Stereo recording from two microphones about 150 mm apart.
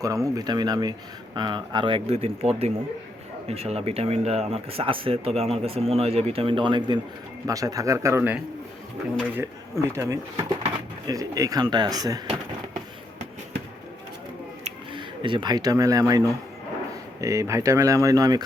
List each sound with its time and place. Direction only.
0.0 s speech: 25° right (ahead or behind)
14.6 s speech: 35° right (ahead or behind)